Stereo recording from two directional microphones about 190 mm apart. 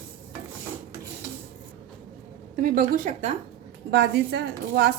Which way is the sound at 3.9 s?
60° right (ahead or behind).